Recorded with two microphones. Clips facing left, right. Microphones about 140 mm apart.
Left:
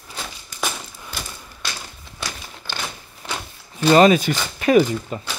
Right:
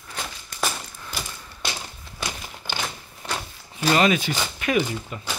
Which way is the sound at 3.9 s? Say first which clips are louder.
Left 7 dB; 35° left (ahead or behind).